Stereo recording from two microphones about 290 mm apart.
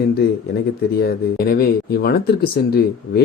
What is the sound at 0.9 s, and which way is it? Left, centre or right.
Speech, left.